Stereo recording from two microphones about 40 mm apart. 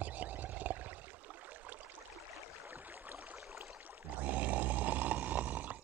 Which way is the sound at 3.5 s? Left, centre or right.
Right.